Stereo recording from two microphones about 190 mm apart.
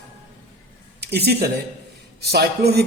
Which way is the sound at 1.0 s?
60° right (ahead or behind).